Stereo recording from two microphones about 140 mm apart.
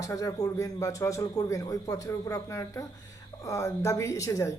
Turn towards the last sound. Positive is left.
turn(degrees=20)  # may be behind; listen again after turning